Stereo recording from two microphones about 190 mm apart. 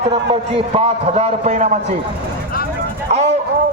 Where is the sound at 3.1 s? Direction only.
35° right (ahead or behind).